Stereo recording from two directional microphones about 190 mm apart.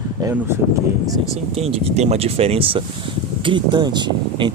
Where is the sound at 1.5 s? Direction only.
30° right (ahead or behind).